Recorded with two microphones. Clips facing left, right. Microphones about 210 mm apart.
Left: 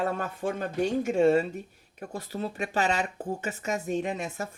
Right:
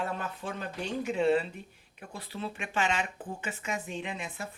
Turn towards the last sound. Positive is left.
turn(degrees=40)  # may be behind; listen again after turning